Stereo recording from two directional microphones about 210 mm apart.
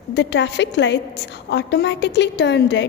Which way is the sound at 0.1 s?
55° left (ahead or behind).